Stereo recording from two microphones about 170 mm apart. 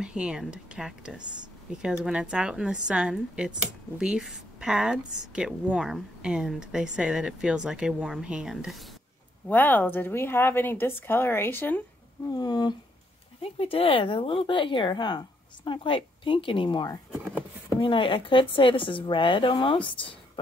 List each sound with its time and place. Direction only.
0.0 s a woman's voice: 5° right (ahead or behind)
9.5 s speech: 10° left (ahead or behind)
12.3 s speech: 25° left (ahead or behind)
17.1 s a sound: 5° right (ahead or behind)
17.7 s speech: 30° left (ahead or behind)